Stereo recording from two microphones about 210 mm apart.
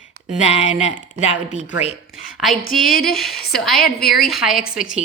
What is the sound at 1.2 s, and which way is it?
Speech, 30° left (ahead or behind).